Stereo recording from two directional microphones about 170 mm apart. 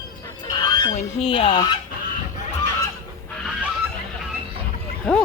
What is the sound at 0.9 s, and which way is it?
Speech, 30° left (ahead or behind).